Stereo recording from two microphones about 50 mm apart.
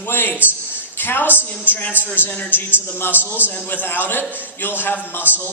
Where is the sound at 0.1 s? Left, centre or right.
Left.